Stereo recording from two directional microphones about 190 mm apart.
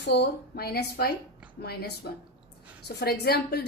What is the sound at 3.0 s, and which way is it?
Speech, 55° left (ahead or behind).